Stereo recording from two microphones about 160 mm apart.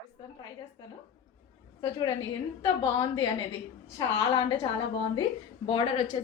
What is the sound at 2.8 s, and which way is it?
A woman's voice, 30° left (ahead or behind).